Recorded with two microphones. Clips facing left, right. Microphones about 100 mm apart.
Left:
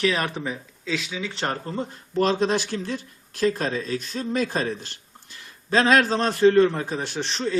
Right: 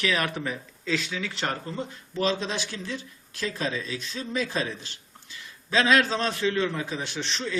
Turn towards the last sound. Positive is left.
turn(degrees=35)  # may be behind; listen again after turning